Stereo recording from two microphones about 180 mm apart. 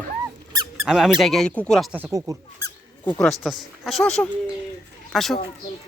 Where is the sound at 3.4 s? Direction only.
Centre (ahead or behind).